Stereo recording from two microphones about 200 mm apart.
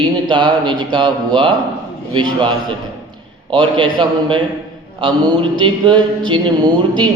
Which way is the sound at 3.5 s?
25° right (ahead or behind).